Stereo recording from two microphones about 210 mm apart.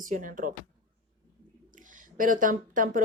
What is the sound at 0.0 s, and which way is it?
Speech, 40° right (ahead or behind).